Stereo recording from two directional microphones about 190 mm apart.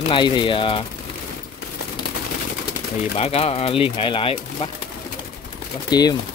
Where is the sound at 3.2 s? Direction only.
30° left (ahead or behind).